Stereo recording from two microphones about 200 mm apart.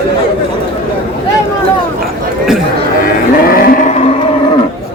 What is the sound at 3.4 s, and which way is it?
Cattle, 45° left (ahead or behind).